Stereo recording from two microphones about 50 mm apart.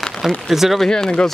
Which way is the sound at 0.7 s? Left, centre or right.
Centre.